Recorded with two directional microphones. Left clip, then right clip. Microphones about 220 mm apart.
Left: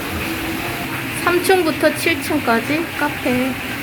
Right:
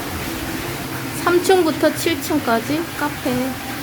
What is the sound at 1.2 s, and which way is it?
Speech, 15° right (ahead or behind).